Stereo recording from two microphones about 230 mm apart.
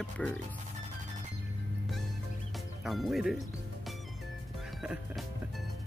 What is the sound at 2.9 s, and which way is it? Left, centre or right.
Speech, centre.